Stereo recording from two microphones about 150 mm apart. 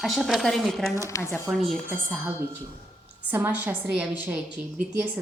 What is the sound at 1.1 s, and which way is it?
Speech, 20° left (ahead or behind).